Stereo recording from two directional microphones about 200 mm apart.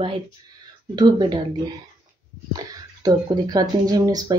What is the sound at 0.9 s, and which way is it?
Speech, 20° right (ahead or behind).